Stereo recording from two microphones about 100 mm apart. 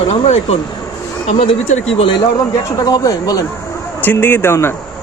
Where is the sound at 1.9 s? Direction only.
55° left (ahead or behind).